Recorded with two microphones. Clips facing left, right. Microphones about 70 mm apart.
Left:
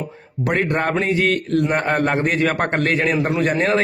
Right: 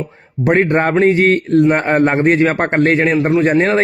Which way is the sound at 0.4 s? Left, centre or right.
Right.